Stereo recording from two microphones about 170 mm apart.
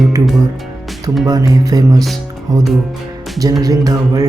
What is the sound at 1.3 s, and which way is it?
Music, 20° right (ahead or behind).